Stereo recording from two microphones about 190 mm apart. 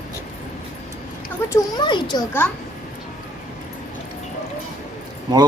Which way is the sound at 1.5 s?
25° left (ahead or behind).